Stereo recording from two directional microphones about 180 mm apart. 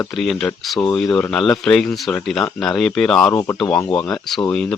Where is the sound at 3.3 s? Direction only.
15° left (ahead or behind).